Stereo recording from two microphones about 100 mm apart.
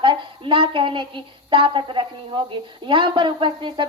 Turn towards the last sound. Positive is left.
turn(degrees=-50)  # may be behind; listen again after turning